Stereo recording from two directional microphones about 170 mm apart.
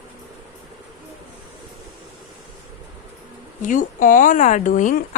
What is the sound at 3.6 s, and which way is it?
Speech, 50° left (ahead or behind).